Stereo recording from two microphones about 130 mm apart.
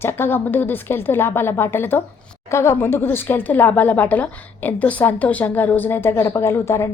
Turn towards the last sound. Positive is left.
turn(degrees=20)  # may be behind; listen again after turning